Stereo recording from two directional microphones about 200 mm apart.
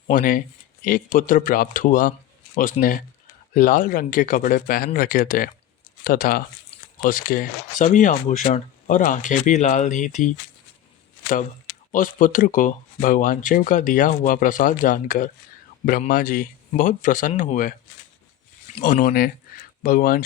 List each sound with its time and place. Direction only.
0.1 s speech: 40° left (ahead or behind)
11.9 s speech: 40° left (ahead or behind)
18.8 s speech: 45° left (ahead or behind)